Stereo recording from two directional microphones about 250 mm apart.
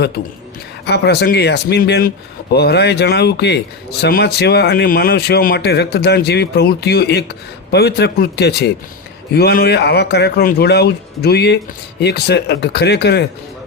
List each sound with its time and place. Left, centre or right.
0.9 s speech: left